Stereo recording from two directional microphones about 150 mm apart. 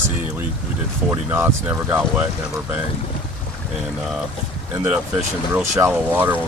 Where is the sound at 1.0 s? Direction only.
15° right (ahead or behind).